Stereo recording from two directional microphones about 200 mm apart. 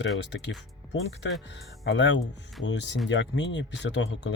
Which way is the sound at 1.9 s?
65° left (ahead or behind).